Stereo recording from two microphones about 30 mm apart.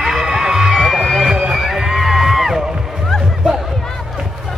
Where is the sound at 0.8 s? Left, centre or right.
Centre.